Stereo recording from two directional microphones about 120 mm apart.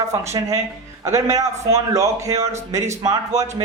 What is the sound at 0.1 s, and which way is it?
A man's voice, 25° right (ahead or behind).